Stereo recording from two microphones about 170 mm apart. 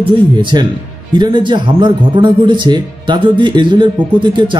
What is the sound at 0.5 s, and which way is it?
Speech, 25° right (ahead or behind).